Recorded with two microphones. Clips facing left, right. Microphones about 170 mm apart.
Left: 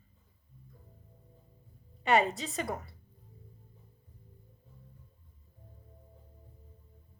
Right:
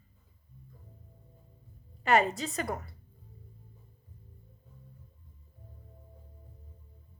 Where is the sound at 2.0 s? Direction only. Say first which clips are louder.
Right 1 dB; centre (ahead or behind).